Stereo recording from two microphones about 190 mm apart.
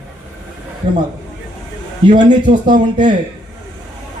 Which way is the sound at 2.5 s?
40° right (ahead or behind).